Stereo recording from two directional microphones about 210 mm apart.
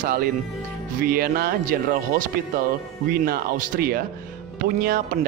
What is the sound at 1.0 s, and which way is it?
Speech, 45° right (ahead or behind).